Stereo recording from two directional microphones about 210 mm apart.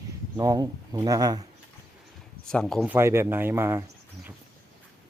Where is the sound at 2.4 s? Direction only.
5° left (ahead or behind).